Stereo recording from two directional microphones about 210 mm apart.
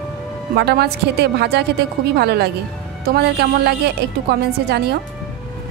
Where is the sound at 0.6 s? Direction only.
50° right (ahead or behind).